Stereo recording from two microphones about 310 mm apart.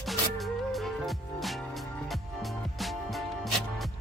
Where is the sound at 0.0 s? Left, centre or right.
Centre.